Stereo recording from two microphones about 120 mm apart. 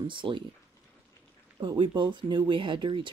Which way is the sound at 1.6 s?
40° right (ahead or behind).